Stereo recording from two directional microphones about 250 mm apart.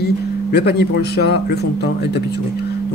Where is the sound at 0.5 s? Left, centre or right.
Left.